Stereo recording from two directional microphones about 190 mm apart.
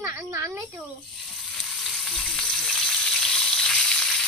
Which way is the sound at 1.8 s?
Centre (ahead or behind).